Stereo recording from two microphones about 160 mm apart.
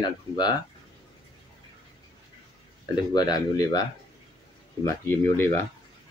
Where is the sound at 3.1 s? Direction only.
25° left (ahead or behind).